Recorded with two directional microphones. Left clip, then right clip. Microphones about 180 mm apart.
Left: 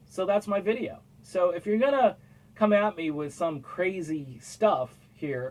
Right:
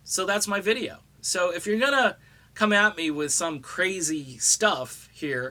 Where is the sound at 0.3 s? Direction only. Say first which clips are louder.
Right 1 dB; 25° right (ahead or behind).